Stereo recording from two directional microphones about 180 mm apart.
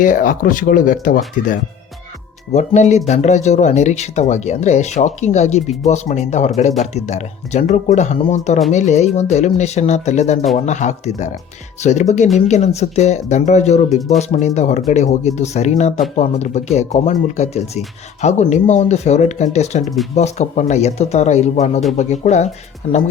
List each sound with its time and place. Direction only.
0.0 s speech: 45° left (ahead or behind)
2.5 s speech: 40° left (ahead or behind)
19.8 s speech: centre (ahead or behind)
20.1 s speech: 40° left (ahead or behind)